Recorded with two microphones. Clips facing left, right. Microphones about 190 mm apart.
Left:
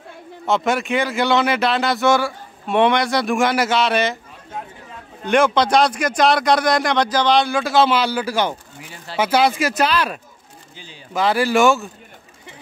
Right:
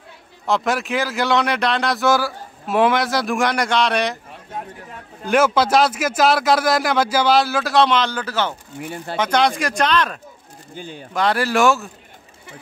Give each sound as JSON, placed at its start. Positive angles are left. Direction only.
{"t": 0.5, "sound": "a man's voice", "side_deg": 0}
{"t": 5.2, "sound": "a man's voice", "side_deg": -5}
{"t": 8.8, "sound": "speech", "side_deg": -55}
{"t": 9.1, "sound": "speech", "side_deg": 5}
{"t": 10.7, "sound": "speech", "side_deg": -50}
{"t": 11.1, "sound": "a man's voice", "side_deg": 0}